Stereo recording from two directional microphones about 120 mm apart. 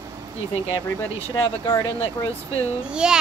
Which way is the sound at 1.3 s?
30° left (ahead or behind).